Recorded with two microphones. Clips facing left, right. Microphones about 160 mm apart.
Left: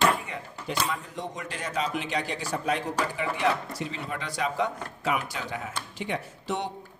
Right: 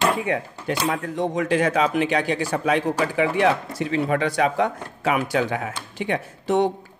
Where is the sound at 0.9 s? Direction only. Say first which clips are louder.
Right 10 dB; 80° right.